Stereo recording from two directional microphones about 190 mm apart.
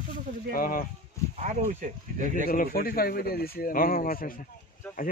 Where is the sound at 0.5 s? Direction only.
45° left (ahead or behind).